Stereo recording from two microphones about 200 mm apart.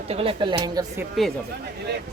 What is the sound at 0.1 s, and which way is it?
Speech, 30° right (ahead or behind).